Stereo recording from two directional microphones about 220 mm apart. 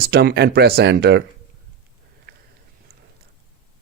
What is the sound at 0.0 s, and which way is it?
Speech, 45° right (ahead or behind).